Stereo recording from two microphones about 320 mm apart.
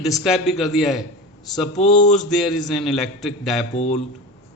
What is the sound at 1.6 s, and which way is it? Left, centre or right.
Speech, left.